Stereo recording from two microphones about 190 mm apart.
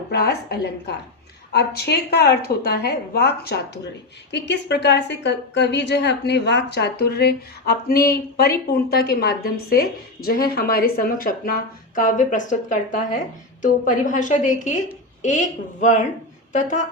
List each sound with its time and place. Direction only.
0.1 s a woman's voice: 60° left (ahead or behind); by 16.8 s 40° left (ahead or behind)